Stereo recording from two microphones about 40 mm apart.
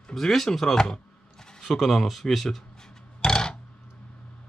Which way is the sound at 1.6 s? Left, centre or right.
Centre.